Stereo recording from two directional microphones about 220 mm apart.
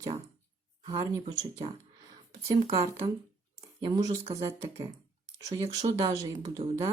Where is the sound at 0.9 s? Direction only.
20° right (ahead or behind).